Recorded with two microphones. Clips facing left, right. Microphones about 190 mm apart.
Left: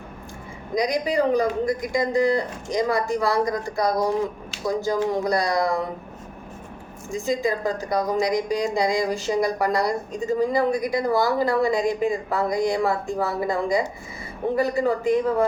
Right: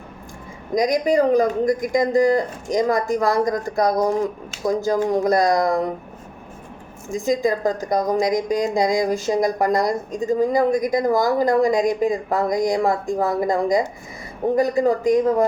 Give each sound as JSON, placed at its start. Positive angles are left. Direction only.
{"t": 0.8, "sound": "a woman's voice", "side_deg": -45}
{"t": 7.3, "sound": "a woman's voice", "side_deg": -45}